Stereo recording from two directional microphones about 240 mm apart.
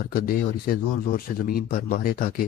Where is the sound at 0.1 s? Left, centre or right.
Left.